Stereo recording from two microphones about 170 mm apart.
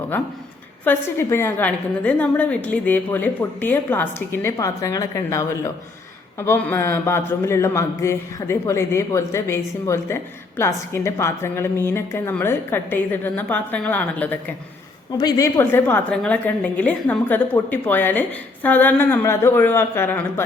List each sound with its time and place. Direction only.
0.9 s a woman's voice: 15° left (ahead or behind)
15.2 s a woman's voice: 20° left (ahead or behind)